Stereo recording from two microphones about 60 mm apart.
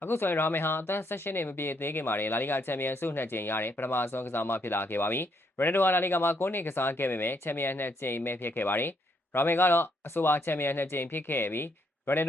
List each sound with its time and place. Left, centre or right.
0.0 s speech: left